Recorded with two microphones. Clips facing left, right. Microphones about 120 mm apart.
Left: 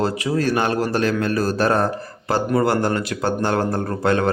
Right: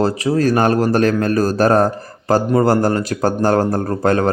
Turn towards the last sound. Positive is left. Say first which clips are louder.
# right 3 dB
turn(degrees=-40)  # may be behind; listen again after turning